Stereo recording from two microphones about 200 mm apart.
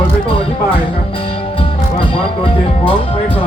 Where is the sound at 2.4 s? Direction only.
25° left (ahead or behind).